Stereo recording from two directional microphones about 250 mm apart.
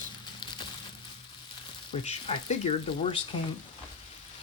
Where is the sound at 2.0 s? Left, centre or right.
Left.